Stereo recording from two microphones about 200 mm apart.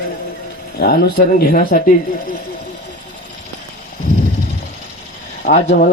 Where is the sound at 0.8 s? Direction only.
50° left (ahead or behind).